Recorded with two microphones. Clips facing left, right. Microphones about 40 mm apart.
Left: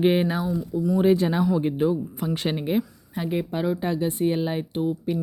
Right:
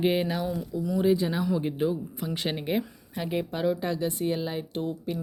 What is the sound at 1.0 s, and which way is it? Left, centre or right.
Speech, left.